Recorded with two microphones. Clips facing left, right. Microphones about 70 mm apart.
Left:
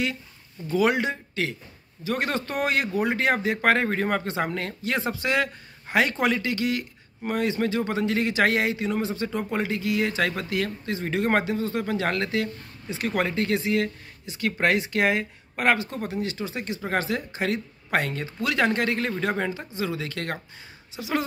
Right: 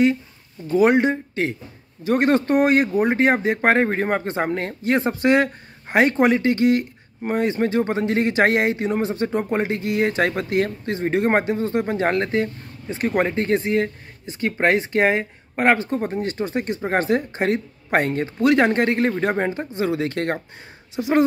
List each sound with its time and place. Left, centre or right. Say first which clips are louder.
0.7 s speech: right 6 dB; right
2.0 s speech: right 9 dB; right
19.7 s speech: right 7 dB; right